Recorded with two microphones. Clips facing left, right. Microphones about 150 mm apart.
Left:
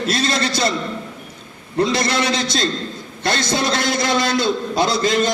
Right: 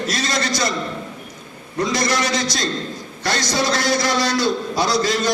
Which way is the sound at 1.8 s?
25° left (ahead or behind).